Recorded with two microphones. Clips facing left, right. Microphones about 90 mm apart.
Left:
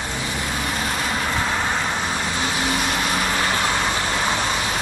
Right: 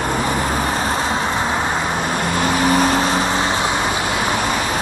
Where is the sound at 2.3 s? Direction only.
50° right (ahead or behind); by 3.9 s 20° right (ahead or behind).